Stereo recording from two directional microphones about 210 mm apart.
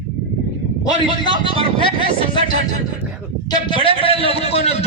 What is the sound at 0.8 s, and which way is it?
A man's voice, 20° left (ahead or behind).